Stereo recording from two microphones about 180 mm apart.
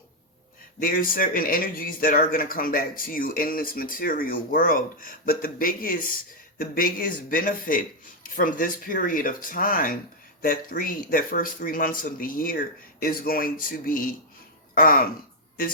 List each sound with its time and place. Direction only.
0.8 s speech: 55° left (ahead or behind)